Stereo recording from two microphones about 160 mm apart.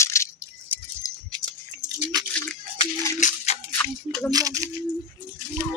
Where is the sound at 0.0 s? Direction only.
15° left (ahead or behind).